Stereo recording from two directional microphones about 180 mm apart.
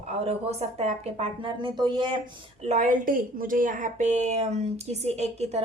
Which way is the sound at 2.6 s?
45° right (ahead or behind).